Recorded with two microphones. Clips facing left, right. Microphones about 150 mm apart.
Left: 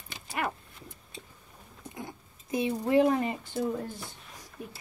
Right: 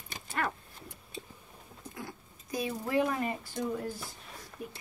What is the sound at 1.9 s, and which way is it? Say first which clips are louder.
Speech: left 2 dB; 25° left (ahead or behind).